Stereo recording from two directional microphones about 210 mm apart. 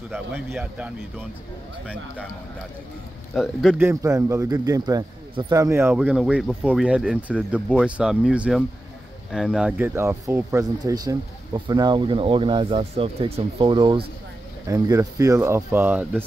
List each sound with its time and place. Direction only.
0.1 s speech: centre (ahead or behind)
3.3 s speech: centre (ahead or behind)
3.8 s a man's voice: 15° right (ahead or behind)